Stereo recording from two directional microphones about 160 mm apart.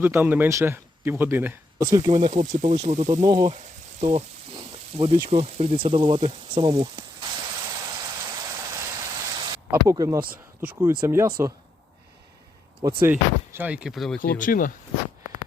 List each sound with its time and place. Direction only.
0.0 s speech: 10° right (ahead or behind)
1.8 s speech: 25° right (ahead or behind)
2.0 s speech: 45° right (ahead or behind)
3.1 s speech: 25° right (ahead or behind)
4.0 s a sound: 35° right (ahead or behind); by 9.2 s 20° right (ahead or behind)
9.8 s speech: 20° right (ahead or behind)
10.6 s speech: 10° right (ahead or behind)
13.0 s speech: 15° right (ahead or behind)
14.2 s speech: 60° left (ahead or behind)